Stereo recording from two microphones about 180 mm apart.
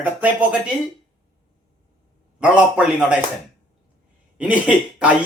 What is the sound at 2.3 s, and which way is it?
Speech, 5° right (ahead or behind).